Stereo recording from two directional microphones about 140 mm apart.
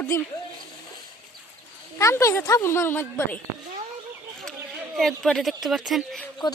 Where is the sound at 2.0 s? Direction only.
20° left (ahead or behind).